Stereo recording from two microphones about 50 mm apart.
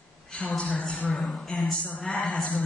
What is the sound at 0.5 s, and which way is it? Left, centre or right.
Speech, left.